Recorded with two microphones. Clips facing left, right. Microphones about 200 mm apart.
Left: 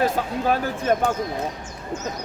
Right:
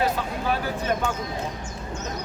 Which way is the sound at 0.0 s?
45° left (ahead or behind).